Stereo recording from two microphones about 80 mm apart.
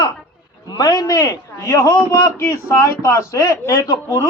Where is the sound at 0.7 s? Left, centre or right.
Left.